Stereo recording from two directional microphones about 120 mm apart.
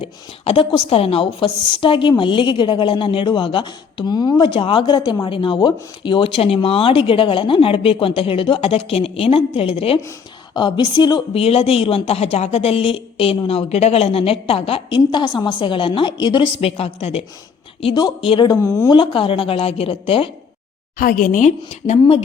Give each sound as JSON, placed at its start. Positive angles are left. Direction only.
{"t": 0.0, "sound": "speech", "side_deg": 50}
{"t": 10.5, "sound": "a woman's voice", "side_deg": 40}
{"t": 11.3, "sound": "speech", "side_deg": 55}
{"t": 17.9, "sound": "a woman's voice", "side_deg": 45}
{"t": 18.4, "sound": "speech", "side_deg": 25}
{"t": 18.9, "sound": "speech", "side_deg": 45}
{"t": 21.2, "sound": "a woman's voice", "side_deg": 85}